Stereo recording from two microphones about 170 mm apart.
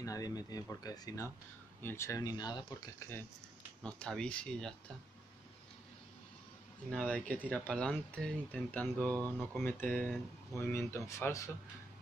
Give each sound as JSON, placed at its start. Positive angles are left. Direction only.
{"t": 0.0, "sound": "speech", "side_deg": 20}
{"t": 3.8, "sound": "speech", "side_deg": 5}
{"t": 6.9, "sound": "speech", "side_deg": 5}